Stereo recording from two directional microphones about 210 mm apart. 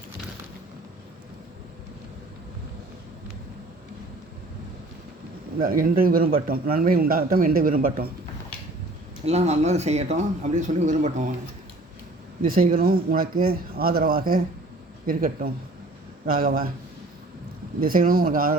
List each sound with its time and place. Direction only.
5.6 s speech: 40° right (ahead or behind)
9.2 s speech: 30° right (ahead or behind)
12.4 s speech: 40° right (ahead or behind)
17.7 s speech: 40° right (ahead or behind)